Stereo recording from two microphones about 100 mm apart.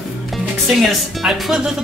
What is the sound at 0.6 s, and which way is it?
Speech, centre (ahead or behind).